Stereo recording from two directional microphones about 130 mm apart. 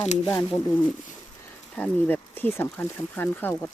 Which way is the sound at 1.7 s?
10° left (ahead or behind).